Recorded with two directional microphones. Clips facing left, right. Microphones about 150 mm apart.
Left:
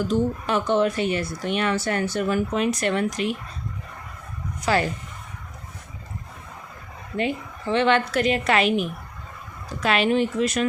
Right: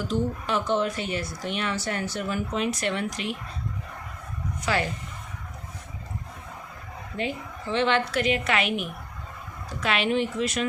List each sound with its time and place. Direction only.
0.1 s a woman's voice: 55° left (ahead or behind)
2.6 s speech: 45° left (ahead or behind)
4.7 s a woman's voice: 40° left (ahead or behind)
7.7 s a woman's voice: 60° left (ahead or behind)
8.1 s a woman's voice: 40° left (ahead or behind)